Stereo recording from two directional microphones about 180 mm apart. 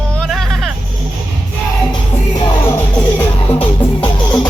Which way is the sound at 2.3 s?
10° left (ahead or behind).